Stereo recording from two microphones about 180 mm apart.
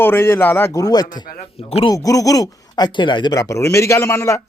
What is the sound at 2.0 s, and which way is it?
A man's voice, 20° left (ahead or behind).